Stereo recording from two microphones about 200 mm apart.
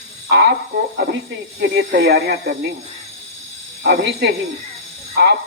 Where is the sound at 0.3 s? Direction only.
55° right (ahead or behind).